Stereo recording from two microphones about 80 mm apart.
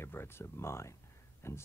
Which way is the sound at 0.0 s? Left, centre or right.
Left.